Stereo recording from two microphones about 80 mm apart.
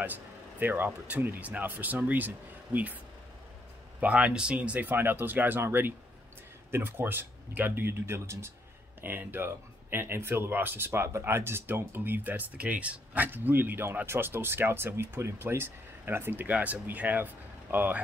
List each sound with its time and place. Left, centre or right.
0.0 s speech: right
4.0 s speech: centre